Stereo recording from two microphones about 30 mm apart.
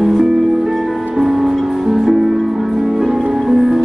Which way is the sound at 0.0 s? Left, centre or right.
Centre.